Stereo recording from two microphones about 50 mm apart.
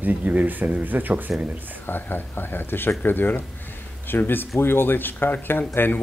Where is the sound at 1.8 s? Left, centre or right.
Left.